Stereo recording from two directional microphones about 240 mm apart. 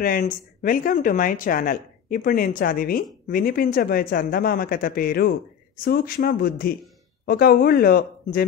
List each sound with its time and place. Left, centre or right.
0.0 s speech: left